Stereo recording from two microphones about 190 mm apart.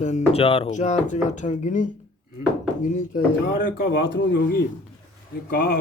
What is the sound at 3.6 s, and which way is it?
Speech, 65° left (ahead or behind).